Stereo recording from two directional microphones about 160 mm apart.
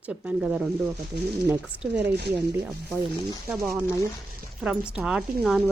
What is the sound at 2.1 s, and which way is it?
Speech, 90° right.